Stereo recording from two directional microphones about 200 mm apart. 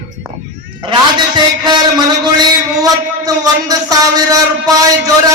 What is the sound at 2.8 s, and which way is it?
A man's voice, 20° right (ahead or behind).